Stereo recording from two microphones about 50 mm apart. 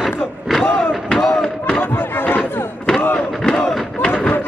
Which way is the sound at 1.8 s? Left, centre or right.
Left.